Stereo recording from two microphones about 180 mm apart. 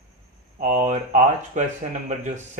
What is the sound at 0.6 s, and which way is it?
A man's voice, 45° right (ahead or behind).